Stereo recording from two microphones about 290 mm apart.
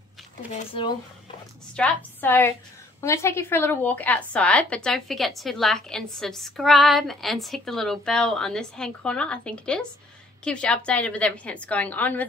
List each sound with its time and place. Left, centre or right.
0.5 s a woman's voice: centre
1.8 s a woman's voice: centre